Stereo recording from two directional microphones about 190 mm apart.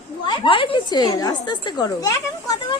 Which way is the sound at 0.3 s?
25° left (ahead or behind).